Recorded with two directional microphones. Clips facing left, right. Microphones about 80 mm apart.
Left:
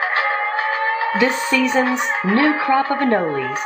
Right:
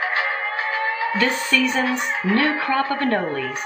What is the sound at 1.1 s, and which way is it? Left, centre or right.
Speech, centre.